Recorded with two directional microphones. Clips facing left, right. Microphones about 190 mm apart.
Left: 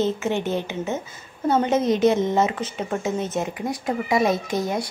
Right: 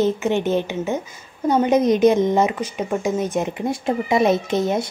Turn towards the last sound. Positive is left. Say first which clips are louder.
# right 4 dB
turn(degrees=-25)  # may be behind; listen again after turning